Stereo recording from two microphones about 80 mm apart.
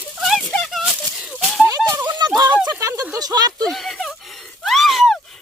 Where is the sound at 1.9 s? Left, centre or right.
Right.